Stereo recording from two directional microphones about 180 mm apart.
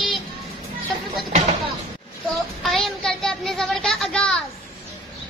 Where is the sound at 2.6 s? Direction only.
Centre (ahead or behind).